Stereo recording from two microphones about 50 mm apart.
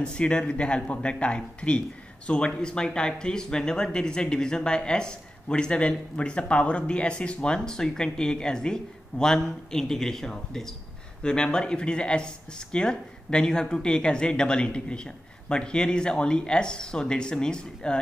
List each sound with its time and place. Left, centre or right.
0.0 s speech: left